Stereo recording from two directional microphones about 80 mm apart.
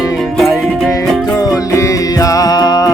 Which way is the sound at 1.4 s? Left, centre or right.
Left.